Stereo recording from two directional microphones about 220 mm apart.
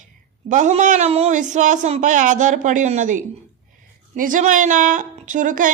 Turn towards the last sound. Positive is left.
turn(degrees=-35)  # may be behind; listen again after turning